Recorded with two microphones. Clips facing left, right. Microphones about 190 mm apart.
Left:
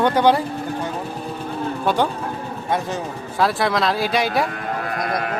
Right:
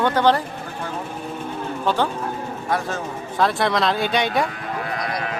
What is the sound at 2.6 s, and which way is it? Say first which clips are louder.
Speech: left 1 dB; 20° left (ahead or behind).